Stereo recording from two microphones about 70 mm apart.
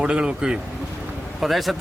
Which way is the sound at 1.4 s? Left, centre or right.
Centre.